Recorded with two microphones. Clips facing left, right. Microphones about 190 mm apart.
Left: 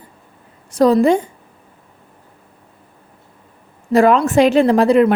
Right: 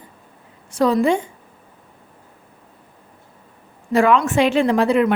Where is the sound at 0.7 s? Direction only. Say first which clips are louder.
Left 5 dB; 40° left (ahead or behind).